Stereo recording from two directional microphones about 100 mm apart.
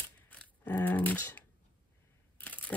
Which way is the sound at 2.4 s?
15° left (ahead or behind).